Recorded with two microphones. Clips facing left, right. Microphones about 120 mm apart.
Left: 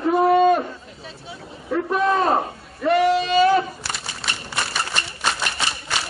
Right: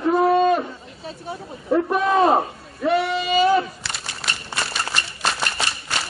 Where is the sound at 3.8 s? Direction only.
45° left (ahead or behind).